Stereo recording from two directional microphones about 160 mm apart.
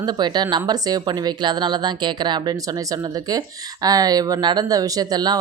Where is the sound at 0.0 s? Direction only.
25° right (ahead or behind).